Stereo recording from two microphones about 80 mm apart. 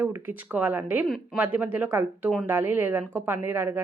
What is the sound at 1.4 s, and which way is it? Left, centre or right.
A woman's voice, right.